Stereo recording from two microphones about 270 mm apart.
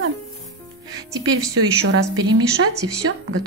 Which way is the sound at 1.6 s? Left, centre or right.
Right.